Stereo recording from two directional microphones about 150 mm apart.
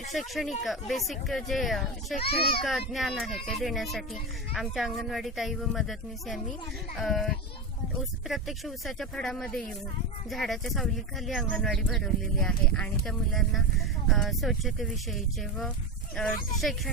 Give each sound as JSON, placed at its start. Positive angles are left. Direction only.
{"t": 0.1, "sound": "speech", "side_deg": 0}
{"t": 2.3, "sound": "a child's voice", "side_deg": 90}
{"t": 2.6, "sound": "speech", "side_deg": 0}